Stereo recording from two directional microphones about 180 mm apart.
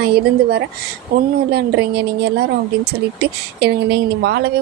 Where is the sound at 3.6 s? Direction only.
65° right (ahead or behind).